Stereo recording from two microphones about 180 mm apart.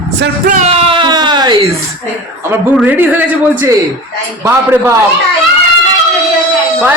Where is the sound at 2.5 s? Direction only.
10° right (ahead or behind).